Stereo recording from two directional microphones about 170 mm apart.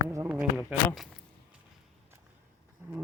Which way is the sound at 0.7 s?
Centre (ahead or behind).